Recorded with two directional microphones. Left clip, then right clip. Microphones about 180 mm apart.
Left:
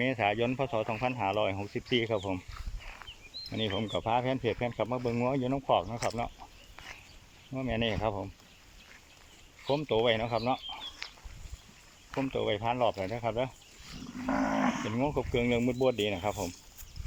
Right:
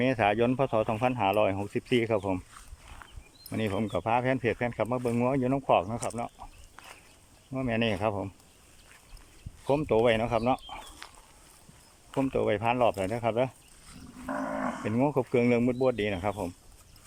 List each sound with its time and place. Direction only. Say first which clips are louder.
0.0 s speech: right 4 dB; 10° right (ahead or behind)
2.8 s a sound: left 3 dB; 5° left (ahead or behind)
3.5 s speech: right 2 dB; 5° right (ahead or behind)
6.8 s a sound: left 2 dB; 10° left (ahead or behind)
7.5 s speech: right 3 dB; 5° right (ahead or behind)
9.6 s speech: right 3 dB; 10° right (ahead or behind)
12.3 s speech: right 4 dB; 10° right (ahead or behind)
14.3 s dog: left 3 dB; 20° left (ahead or behind)
14.8 s speech: right 4 dB; 10° right (ahead or behind)